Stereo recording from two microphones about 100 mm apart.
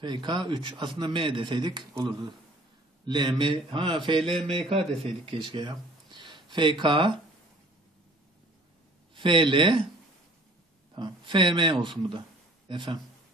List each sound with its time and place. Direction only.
0.0 s speech: 50° right (ahead or behind)
3.1 s speech: 50° right (ahead or behind)
9.1 s speech: 55° right (ahead or behind)
11.0 s a man's voice: 50° right (ahead or behind)